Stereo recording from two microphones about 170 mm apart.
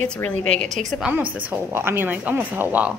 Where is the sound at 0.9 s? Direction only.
5° right (ahead or behind).